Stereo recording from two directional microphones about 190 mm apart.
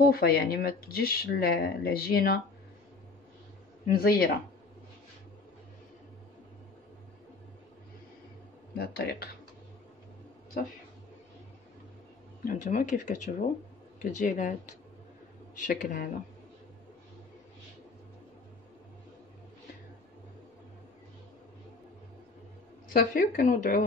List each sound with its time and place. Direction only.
0.0 s speech: 50° left (ahead or behind)
3.9 s speech: 50° left (ahead or behind)
8.7 s speech: 55° left (ahead or behind)
12.4 s speech: 40° left (ahead or behind)
22.9 s speech: 50° left (ahead or behind)